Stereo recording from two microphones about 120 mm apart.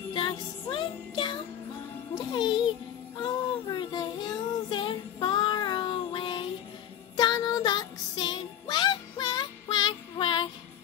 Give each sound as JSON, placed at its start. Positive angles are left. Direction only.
{"t": 0.1, "sound": "music", "side_deg": 45}
{"t": 2.1, "sound": "a child's voice", "side_deg": 40}
{"t": 3.2, "sound": "child singing", "side_deg": 40}
{"t": 7.2, "sound": "music", "side_deg": 35}